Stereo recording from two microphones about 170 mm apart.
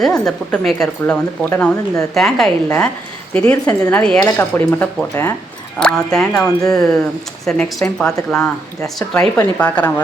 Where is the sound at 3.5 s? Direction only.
20° left (ahead or behind).